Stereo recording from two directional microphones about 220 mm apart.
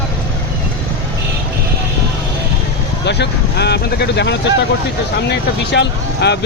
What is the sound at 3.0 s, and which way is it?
Speech, 50° left (ahead or behind).